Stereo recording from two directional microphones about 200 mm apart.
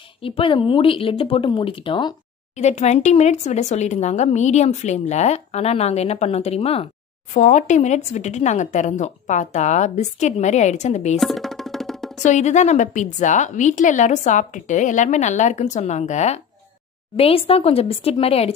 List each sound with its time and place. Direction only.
0.2 s speech: 25° left (ahead or behind)
2.5 s speech: 35° left (ahead or behind)
11.1 s music: centre (ahead or behind)
12.2 s speech: 35° left (ahead or behind)